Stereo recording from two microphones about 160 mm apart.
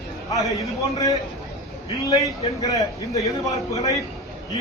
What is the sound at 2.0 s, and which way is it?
A man's voice, 20° left (ahead or behind).